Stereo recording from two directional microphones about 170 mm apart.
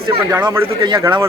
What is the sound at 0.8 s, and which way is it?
Speech, 20° right (ahead or behind).